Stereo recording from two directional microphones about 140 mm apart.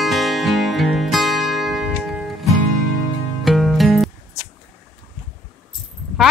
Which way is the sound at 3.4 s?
Centre (ahead or behind).